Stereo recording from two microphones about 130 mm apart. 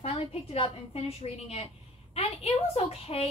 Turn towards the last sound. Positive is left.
turn(degrees=50)  # may be behind; listen again after turning